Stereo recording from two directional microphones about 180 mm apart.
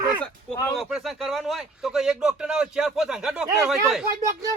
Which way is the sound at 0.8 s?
Centre (ahead or behind).